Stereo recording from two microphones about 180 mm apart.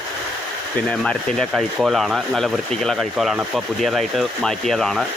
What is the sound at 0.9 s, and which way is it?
Speech, 5° left (ahead or behind).